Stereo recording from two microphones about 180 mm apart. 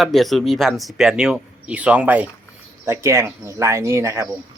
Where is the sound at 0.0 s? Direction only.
Centre (ahead or behind); by 4.3 s 15° right (ahead or behind).